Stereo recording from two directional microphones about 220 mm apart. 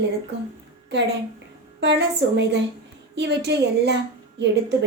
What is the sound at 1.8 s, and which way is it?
A woman's voice, 50° right (ahead or behind).